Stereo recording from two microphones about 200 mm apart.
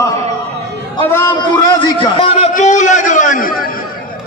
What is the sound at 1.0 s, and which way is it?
A man's voice, 10° left (ahead or behind).